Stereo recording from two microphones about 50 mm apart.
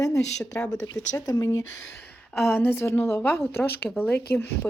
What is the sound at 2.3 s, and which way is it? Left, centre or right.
A woman's voice, left.